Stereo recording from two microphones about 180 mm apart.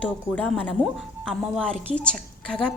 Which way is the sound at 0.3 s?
5° left (ahead or behind).